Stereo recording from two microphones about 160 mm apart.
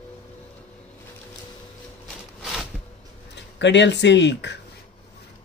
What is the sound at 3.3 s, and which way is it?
Speech, 90° left.